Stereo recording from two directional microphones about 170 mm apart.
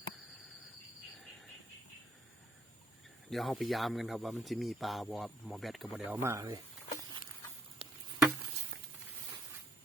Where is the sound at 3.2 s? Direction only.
Centre (ahead or behind).